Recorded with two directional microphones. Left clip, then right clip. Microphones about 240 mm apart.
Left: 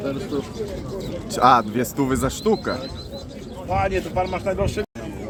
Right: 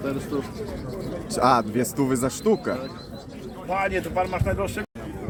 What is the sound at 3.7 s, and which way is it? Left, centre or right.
Speech, right.